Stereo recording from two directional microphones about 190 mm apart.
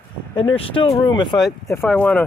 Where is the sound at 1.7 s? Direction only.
10° left (ahead or behind).